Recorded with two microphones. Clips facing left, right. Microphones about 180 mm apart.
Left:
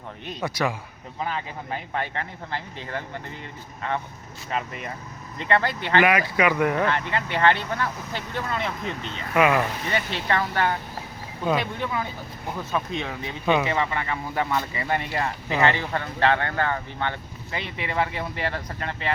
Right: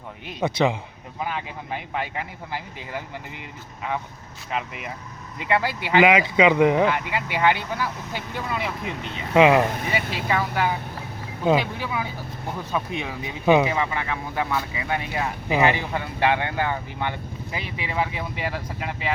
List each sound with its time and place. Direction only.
0.4 s speech: 20° right (ahead or behind)
1.2 s speech: 5° right (ahead or behind)
4.5 s speech: 5° right (ahead or behind); by 9.6 s 20° right (ahead or behind)
9.8 s speech: 5° right (ahead or behind)
13.7 s speech: 5° right (ahead or behind)
15.5 s speech: 15° right (ahead or behind)